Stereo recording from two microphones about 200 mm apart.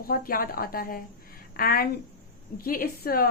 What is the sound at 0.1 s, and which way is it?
A woman's voice, 45° left (ahead or behind).